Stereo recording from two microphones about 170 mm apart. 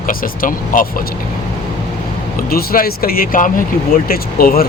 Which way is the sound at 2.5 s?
60° left (ahead or behind).